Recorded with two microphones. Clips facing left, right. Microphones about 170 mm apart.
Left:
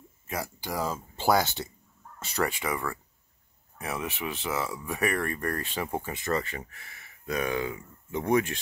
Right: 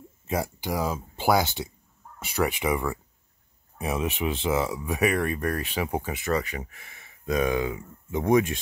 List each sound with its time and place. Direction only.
0.3 s speech: 20° right (ahead or behind)